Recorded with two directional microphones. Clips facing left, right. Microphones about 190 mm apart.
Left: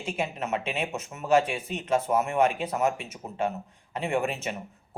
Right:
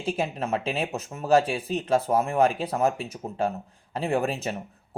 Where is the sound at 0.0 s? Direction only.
35° right (ahead or behind).